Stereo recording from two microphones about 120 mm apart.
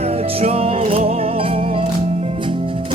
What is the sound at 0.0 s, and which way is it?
Music, 60° right (ahead or behind).